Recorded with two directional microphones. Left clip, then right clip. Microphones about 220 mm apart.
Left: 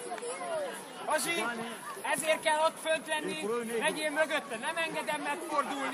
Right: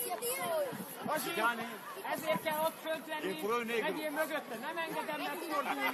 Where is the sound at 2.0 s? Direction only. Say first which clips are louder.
Left 6 dB; 40° left (ahead or behind).